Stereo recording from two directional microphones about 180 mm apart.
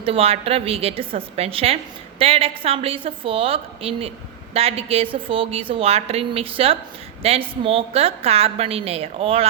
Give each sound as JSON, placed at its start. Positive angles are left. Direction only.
{"t": 0.0, "sound": "a woman's voice", "side_deg": -30}